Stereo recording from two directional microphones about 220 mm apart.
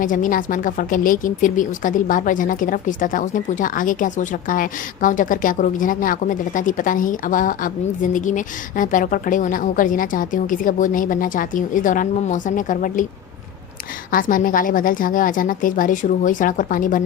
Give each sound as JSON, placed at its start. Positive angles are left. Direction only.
{"t": 0.0, "sound": "speech", "side_deg": 35}
{"t": 14.1, "sound": "speech", "side_deg": 40}